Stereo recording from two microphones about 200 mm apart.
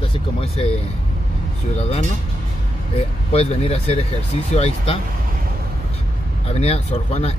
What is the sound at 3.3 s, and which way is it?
Speech, 30° left (ahead or behind).